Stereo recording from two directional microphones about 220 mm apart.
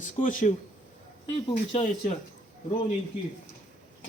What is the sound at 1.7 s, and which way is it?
Speech, 30° left (ahead or behind).